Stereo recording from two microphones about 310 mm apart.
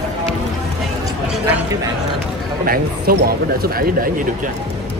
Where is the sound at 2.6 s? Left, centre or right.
Right.